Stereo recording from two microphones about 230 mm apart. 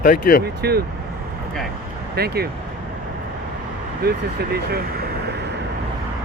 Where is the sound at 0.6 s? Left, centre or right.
Right.